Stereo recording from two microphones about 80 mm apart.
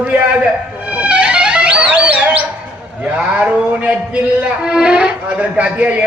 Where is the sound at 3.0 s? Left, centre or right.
Centre.